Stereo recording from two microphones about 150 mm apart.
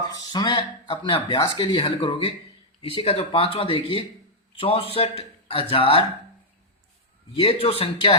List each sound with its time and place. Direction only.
0.3 s speech: 35° left (ahead or behind)
7.3 s speech: 40° left (ahead or behind)